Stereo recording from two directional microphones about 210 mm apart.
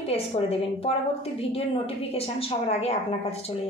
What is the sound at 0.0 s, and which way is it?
A woman's voice, 30° left (ahead or behind).